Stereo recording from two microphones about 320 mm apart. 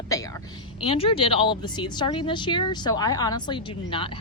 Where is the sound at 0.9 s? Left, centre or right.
Centre.